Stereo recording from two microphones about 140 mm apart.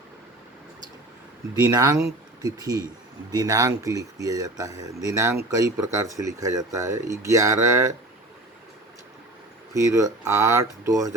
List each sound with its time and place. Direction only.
1.6 s speech: 25° right (ahead or behind)
9.9 s speech: 25° right (ahead or behind)